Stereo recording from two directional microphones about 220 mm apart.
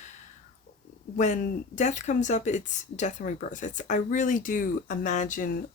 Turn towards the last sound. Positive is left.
turn(degrees=35)  # may be behind; listen again after turning